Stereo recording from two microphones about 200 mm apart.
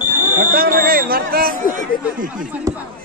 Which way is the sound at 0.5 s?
50° right (ahead or behind).